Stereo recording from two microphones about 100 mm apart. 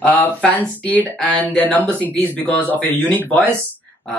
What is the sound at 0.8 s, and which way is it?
Speech, 15° left (ahead or behind).